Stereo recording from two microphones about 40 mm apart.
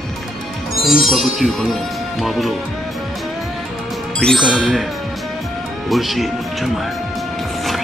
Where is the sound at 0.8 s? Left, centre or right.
Centre.